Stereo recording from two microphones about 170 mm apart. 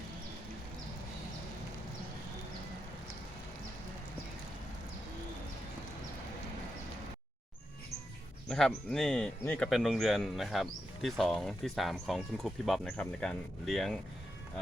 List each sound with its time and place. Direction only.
8.4 s speech: 5° left (ahead or behind)